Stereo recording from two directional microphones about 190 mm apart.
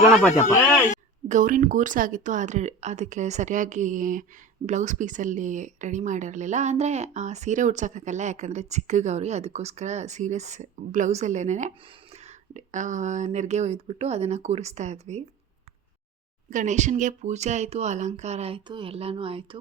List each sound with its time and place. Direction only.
0.1 s speech: centre (ahead or behind)
1.3 s speech: 45° right (ahead or behind)
16.5 s speech: 40° right (ahead or behind)